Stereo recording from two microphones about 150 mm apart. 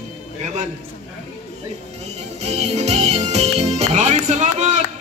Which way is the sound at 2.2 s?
45° right (ahead or behind).